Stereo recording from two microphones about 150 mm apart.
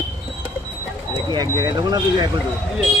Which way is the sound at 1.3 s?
25° right (ahead or behind).